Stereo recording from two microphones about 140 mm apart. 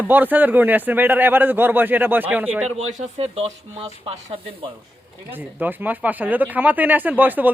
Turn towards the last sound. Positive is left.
turn(degrees=-15)  # may be behind; listen again after turning